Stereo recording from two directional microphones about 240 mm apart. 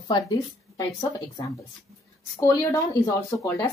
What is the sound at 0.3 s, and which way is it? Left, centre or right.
Speech, centre.